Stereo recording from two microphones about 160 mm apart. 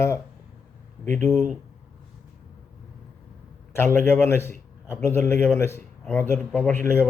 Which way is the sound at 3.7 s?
15° left (ahead or behind).